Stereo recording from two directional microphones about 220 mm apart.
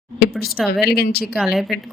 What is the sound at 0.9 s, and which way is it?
Speech, 45° left (ahead or behind).